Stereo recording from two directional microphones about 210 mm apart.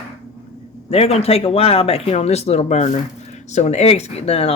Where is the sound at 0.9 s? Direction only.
30° left (ahead or behind).